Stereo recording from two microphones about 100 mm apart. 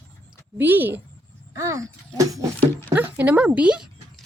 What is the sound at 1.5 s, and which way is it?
Speech, 35° right (ahead or behind).